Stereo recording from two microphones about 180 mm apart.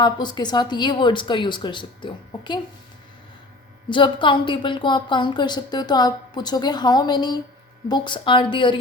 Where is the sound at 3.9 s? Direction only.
25° left (ahead or behind).